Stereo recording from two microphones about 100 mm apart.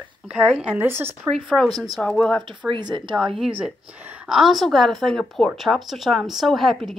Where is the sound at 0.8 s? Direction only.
25° right (ahead or behind).